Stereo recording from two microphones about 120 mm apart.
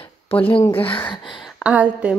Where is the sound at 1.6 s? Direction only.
10° right (ahead or behind).